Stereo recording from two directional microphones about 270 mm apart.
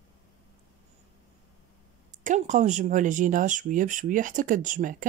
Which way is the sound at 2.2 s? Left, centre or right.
Right.